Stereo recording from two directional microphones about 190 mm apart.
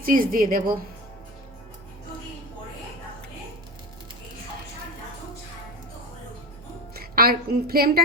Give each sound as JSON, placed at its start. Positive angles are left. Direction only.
{"t": 0.0, "sound": "a woman's voice", "side_deg": -45}
{"t": 6.9, "sound": "a woman's voice", "side_deg": -50}